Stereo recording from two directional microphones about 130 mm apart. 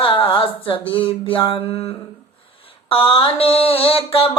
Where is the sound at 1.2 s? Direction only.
40° left (ahead or behind).